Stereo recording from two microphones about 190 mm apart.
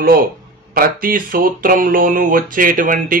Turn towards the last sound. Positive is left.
turn(degrees=-45)  # may be behind; listen again after turning